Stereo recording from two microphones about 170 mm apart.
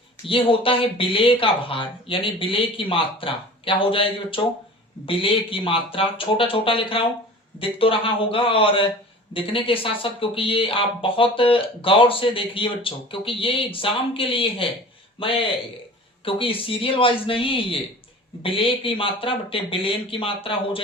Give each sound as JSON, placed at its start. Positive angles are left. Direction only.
{"t": 0.3, "sound": "speech", "side_deg": 30}
{"t": 16.2, "sound": "speech", "side_deg": 30}